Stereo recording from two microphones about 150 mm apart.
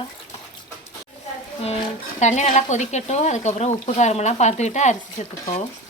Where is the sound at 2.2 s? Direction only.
50° left (ahead or behind).